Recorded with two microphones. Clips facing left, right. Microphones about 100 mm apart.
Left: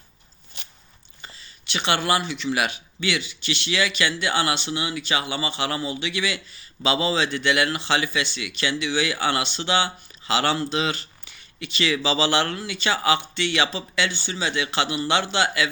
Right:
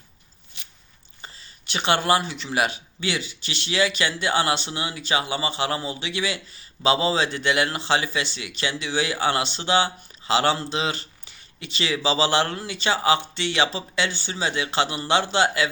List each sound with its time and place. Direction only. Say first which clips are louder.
1.2 s speech: even; 40° right (ahead or behind)